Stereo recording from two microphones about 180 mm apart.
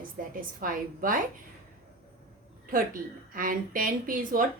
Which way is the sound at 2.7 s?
50° right (ahead or behind).